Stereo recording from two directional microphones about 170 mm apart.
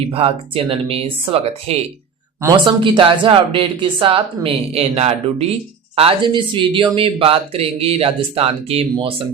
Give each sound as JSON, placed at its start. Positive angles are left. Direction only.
{"t": 0.1, "sound": "speech", "side_deg": -35}
{"t": 2.4, "sound": "speech", "side_deg": -25}